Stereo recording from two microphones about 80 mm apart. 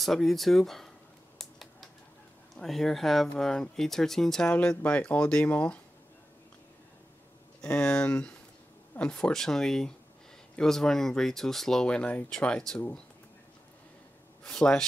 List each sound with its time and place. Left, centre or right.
0.0 s speech: centre
1.4 s typing: centre
2.5 s speech: centre
4.5 s speech: centre
7.6 s speech: centre
14.4 s speech: centre